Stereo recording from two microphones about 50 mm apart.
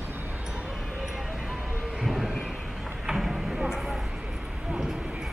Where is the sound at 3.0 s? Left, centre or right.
Centre.